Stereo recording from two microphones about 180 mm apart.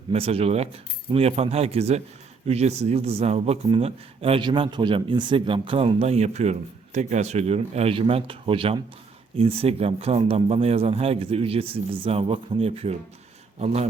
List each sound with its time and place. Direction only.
0.1 s a man's voice: 35° right (ahead or behind)